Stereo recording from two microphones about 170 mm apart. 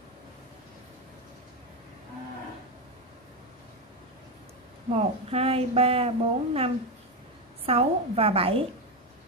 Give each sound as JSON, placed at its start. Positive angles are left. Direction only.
{"t": 4.9, "sound": "a woman's voice", "side_deg": -35}